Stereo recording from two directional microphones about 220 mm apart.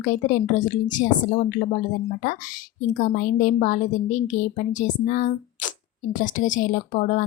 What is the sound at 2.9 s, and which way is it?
Speech, 35° left (ahead or behind).